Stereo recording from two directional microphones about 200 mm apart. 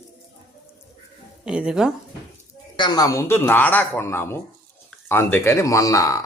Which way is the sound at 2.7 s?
20° left (ahead or behind).